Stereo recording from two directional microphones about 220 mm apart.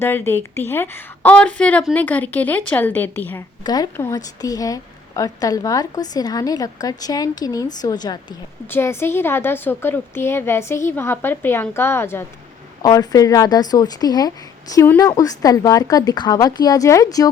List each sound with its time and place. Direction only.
0.0 s a woman's voice: 10° left (ahead or behind)